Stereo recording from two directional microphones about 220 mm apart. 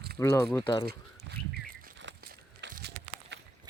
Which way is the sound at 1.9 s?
50° right (ahead or behind).